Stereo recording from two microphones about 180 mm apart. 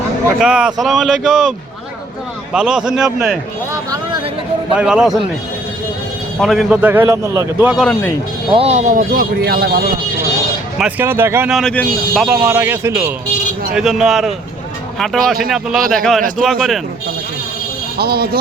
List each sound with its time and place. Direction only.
0.3 s speech: 5° right (ahead or behind)
2.5 s speech: 5° right (ahead or behind)
3.7 s a sound: 20° right (ahead or behind)
4.7 s speech: 5° right (ahead or behind)
6.4 s a man's voice: centre (ahead or behind)
7.8 s speech: 5° left (ahead or behind)
8.5 s speech: 35° right (ahead or behind); by 9.8 s 60° right (ahead or behind)
10.8 s a man's voice: 10° right (ahead or behind)
11.5 s speech: 5° left (ahead or behind)
12.3 s a man's voice: 10° right (ahead or behind)
13.7 s speech: centre (ahead or behind)
17.9 s speech: 60° right (ahead or behind)